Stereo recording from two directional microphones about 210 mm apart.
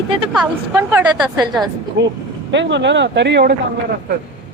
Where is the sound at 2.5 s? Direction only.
60° right (ahead or behind).